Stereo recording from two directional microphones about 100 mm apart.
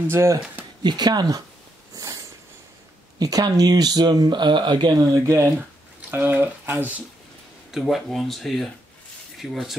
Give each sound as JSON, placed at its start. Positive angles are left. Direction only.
{"t": 0.0, "sound": "speech", "side_deg": -25}
{"t": 0.8, "sound": "speech", "side_deg": -45}
{"t": 2.0, "sound": "sniff", "side_deg": -35}
{"t": 3.2, "sound": "speech", "side_deg": -40}
{"t": 5.1, "sound": "speech", "side_deg": -30}
{"t": 5.6, "sound": "speech", "side_deg": -15}
{"t": 7.7, "sound": "speech", "side_deg": 0}